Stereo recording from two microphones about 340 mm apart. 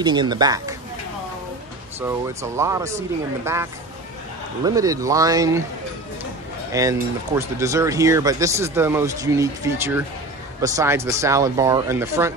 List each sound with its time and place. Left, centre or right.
0.0 s speech: centre
2.0 s speech: centre
4.6 s speech: centre
6.7 s speech: centre